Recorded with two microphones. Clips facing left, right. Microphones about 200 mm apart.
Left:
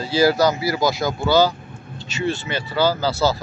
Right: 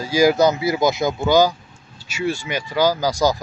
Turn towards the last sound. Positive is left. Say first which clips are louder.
# right 1 dB
turn(degrees=-15)  # may be behind; listen again after turning